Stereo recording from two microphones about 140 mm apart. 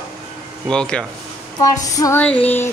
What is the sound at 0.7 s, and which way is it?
Speech, 5° left (ahead or behind).